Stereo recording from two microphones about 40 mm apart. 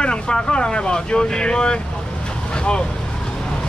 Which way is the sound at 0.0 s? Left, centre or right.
Left.